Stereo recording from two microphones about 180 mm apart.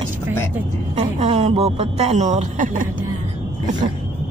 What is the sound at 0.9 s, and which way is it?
Speech, 35° right (ahead or behind).